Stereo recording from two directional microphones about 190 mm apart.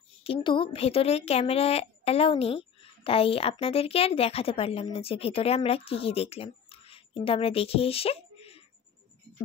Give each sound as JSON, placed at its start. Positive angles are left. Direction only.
{"t": 0.2, "sound": "speech", "side_deg": 25}